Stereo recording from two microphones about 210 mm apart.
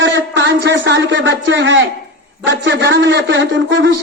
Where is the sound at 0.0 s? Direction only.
60° right (ahead or behind).